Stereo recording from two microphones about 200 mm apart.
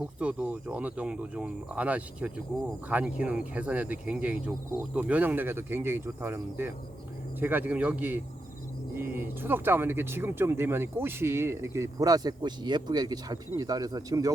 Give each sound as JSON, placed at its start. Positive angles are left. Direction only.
{"t": 0.2, "sound": "speech", "side_deg": -5}